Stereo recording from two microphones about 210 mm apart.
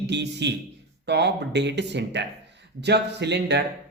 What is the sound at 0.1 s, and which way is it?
A man's voice, 55° right (ahead or behind).